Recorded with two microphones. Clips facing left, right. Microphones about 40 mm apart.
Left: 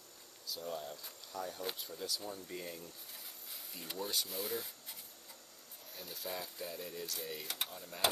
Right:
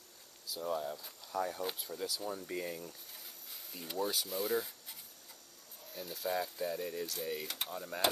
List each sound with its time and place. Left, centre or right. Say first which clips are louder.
0.5 s speech: right 5 dB; centre
1.3 s speech: right 6 dB; centre
1.6 s speech: right 3 dB; centre
2.2 s speech: right 5 dB; centre
3.7 s speech: right 4 dB; centre
7.7 s speech: right 7 dB; centre